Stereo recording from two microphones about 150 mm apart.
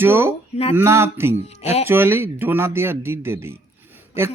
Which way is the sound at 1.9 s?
15° right (ahead or behind).